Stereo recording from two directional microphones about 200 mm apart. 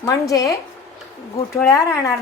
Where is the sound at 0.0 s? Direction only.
15° left (ahead or behind).